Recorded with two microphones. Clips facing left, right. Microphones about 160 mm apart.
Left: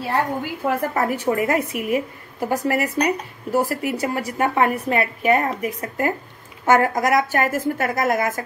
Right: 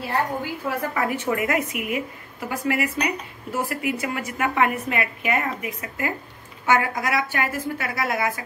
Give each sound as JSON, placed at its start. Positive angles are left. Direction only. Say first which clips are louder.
{"t": 0.7, "sound": "a woman's voice", "louder": "left 5 dB", "side_deg": 40}